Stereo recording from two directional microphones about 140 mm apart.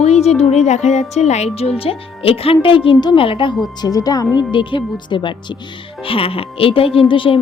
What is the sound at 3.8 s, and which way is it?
Speech, 25° left (ahead or behind).